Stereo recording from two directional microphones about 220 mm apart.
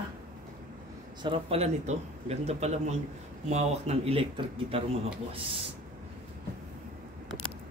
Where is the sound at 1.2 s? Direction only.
25° right (ahead or behind).